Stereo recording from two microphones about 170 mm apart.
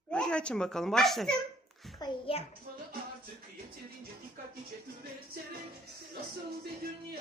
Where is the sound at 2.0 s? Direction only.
35° left (ahead or behind).